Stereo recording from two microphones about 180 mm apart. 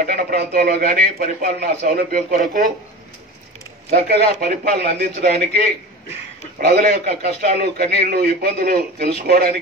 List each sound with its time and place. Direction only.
0.0 s a man's voice: 55° right (ahead or behind)
3.9 s a man's voice: 55° right (ahead or behind)